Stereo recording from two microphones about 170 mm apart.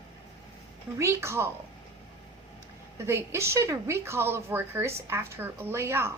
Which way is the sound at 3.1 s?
15° right (ahead or behind).